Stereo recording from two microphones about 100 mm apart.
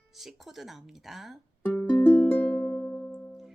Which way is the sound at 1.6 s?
15° left (ahead or behind).